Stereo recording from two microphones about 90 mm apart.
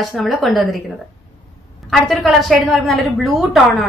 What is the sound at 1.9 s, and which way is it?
Speech, centre (ahead or behind).